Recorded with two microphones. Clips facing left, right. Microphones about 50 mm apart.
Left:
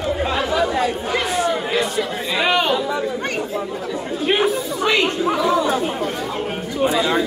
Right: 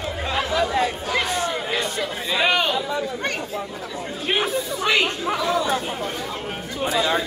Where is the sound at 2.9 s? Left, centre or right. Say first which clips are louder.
Left 3 dB; left.